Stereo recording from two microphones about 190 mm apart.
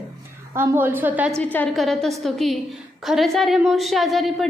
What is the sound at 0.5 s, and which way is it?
Speech, 10° right (ahead or behind).